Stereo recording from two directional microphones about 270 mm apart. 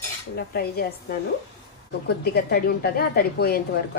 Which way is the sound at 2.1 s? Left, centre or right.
Left.